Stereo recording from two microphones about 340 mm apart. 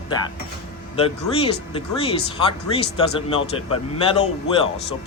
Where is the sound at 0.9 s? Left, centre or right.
Centre.